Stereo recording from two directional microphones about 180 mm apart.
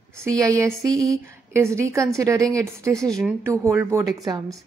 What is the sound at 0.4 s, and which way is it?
A woman's voice, 15° right (ahead or behind).